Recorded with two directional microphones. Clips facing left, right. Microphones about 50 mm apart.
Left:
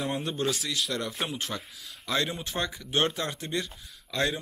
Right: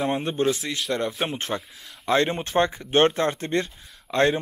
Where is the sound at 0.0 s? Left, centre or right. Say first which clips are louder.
Right 6 dB; right.